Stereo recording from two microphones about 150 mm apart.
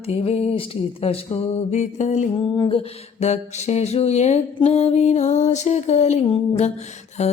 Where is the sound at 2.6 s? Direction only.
40° left (ahead or behind).